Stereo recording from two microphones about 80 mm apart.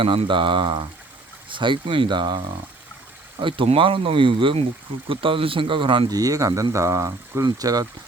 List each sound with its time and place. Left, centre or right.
0.0 s speech: right
1.5 s speech: right
3.4 s speech: right
6.1 s speech: right
7.4 s speech: right